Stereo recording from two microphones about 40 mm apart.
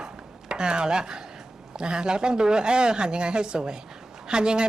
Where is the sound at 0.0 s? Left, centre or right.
Right.